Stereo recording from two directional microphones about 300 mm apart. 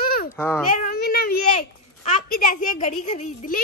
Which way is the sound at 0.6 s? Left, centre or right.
Left.